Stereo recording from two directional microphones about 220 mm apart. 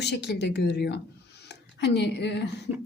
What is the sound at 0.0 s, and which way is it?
A woman's voice, 50° left (ahead or behind).